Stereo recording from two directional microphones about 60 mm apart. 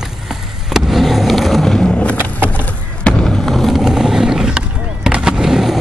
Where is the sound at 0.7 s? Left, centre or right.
Centre.